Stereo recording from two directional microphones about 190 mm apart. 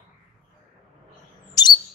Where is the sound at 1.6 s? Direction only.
20° left (ahead or behind).